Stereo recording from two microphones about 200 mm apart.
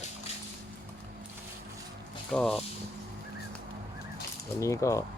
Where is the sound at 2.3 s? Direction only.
5° left (ahead or behind).